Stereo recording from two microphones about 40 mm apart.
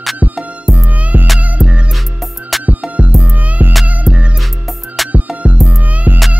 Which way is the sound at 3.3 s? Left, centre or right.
Right.